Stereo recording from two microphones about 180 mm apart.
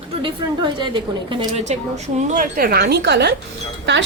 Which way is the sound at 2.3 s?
50° right (ahead or behind).